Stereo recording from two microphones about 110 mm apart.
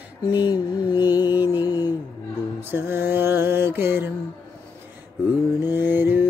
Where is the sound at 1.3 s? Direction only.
20° right (ahead or behind).